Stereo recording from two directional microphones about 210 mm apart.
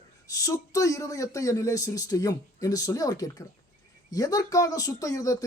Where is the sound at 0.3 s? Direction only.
15° left (ahead or behind).